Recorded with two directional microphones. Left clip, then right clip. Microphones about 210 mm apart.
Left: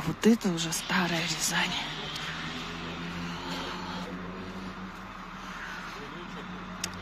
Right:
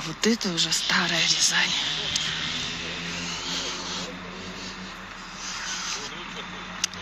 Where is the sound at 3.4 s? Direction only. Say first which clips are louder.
Right 4 dB; 20° left (ahead or behind).